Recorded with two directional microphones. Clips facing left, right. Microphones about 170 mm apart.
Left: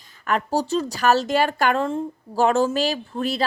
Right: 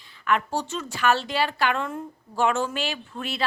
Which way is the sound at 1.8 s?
30° left (ahead or behind).